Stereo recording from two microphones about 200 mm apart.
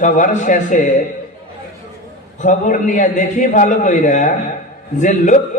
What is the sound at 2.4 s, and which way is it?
A man's voice, 40° left (ahead or behind).